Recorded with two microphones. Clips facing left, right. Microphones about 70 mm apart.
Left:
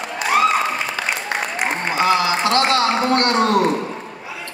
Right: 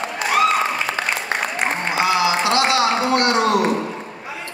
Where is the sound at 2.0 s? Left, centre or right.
Left.